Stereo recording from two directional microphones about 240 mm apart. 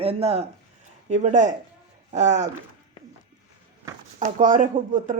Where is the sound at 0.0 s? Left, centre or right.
Right.